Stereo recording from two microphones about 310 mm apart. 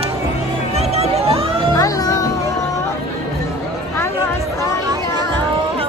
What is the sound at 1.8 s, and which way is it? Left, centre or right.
Music, centre.